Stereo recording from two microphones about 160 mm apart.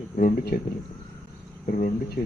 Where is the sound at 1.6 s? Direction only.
60° left (ahead or behind).